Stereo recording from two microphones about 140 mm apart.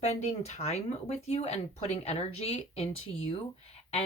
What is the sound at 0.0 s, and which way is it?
Speech, 50° left (ahead or behind).